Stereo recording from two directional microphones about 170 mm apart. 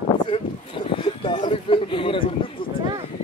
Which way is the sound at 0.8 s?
30° left (ahead or behind).